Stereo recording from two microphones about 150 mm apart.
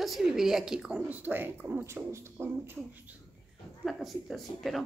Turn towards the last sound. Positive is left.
turn(degrees=0)  # may be behind; listen again after turning